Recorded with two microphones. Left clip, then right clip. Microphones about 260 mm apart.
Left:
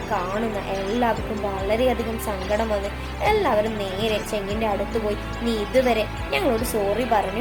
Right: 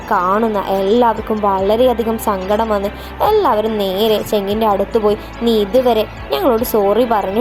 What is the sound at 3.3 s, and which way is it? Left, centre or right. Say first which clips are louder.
Speech: right 6 dB; right.